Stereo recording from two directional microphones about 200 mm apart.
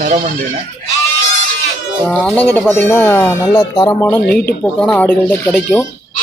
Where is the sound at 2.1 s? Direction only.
5° left (ahead or behind).